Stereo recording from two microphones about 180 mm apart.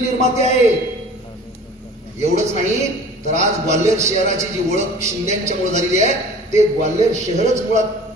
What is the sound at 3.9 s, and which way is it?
Speech, 15° right (ahead or behind).